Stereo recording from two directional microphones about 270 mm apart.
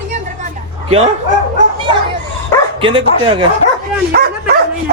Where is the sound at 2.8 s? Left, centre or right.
Centre.